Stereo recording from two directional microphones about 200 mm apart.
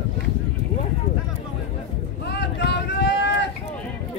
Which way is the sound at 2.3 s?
55° left (ahead or behind).